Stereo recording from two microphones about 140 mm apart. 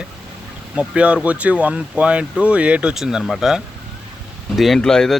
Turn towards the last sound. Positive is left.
turn(degrees=5)  # may be behind; listen again after turning